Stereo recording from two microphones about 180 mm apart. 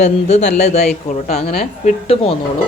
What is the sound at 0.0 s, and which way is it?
A woman's voice, 40° left (ahead or behind).